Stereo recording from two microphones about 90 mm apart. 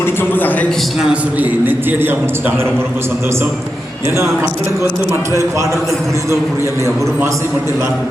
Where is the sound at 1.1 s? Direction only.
15° right (ahead or behind); by 7.1 s 35° right (ahead or behind).